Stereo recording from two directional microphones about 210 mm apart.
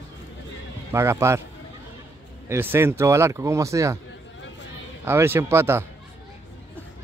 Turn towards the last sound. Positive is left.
turn(degrees=-10)  # may be behind; listen again after turning